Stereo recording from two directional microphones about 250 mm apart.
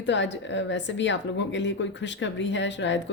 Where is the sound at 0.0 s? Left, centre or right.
Left.